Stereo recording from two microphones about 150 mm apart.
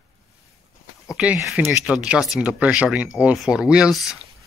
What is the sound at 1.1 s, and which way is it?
Speech, 5° right (ahead or behind).